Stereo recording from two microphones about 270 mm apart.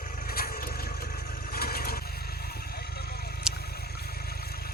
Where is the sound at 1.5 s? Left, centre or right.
Left.